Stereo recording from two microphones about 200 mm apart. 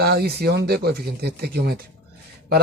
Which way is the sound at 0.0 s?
55° right (ahead or behind).